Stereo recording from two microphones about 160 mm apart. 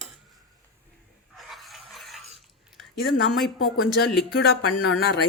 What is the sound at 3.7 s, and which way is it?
Speech, 70° left (ahead or behind).